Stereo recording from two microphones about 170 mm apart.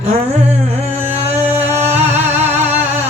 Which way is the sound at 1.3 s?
40° right (ahead or behind).